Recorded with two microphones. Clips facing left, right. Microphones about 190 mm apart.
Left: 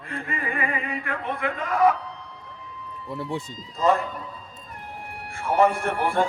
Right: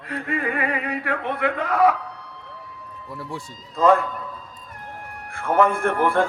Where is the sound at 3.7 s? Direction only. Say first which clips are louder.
Right 4 dB; 55° right (ahead or behind).